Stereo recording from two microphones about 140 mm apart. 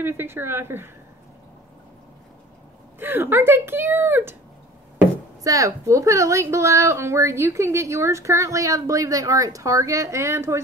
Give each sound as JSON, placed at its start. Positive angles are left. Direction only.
{"t": 0.0, "sound": "speech", "side_deg": -15}
{"t": 3.0, "sound": "speech", "side_deg": -15}
{"t": 5.4, "sound": "a woman's voice", "side_deg": -25}